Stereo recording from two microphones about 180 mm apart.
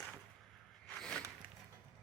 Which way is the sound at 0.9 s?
5° left (ahead or behind).